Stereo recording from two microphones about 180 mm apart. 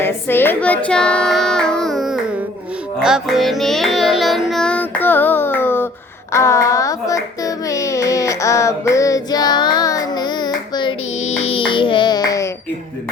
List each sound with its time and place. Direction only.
0.0 s child singing: 10° left (ahead or behind)
3.0 s music: centre (ahead or behind)
6.3 s child singing: 15° left (ahead or behind)
11.2 s a sound: 40° left (ahead or behind); by 12.5 s 20° left (ahead or behind)